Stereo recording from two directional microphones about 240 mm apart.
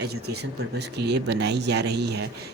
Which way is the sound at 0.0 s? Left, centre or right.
Right.